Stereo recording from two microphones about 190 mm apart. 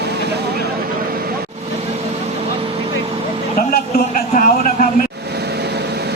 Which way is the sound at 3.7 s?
45° left (ahead or behind).